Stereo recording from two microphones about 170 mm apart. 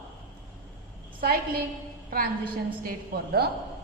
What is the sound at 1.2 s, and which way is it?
A woman's voice, 60° right (ahead or behind).